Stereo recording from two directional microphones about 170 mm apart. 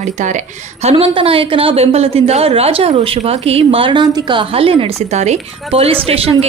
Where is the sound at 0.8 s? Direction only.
30° right (ahead or behind).